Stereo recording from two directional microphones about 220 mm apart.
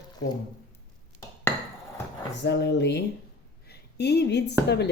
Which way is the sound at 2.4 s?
55° left (ahead or behind).